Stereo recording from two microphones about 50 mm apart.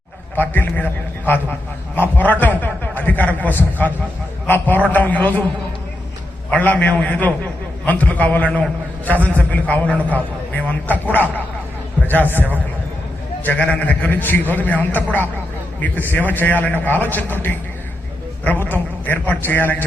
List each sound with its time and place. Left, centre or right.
0.3 s a man's voice: left
6.5 s a man's voice: left
13.4 s a man's voice: left